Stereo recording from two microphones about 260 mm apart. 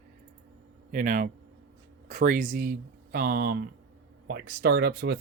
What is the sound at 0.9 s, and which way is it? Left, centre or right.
Speech, right.